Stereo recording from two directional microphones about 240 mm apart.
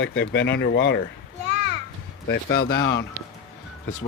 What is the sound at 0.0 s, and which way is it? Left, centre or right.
Speech, left.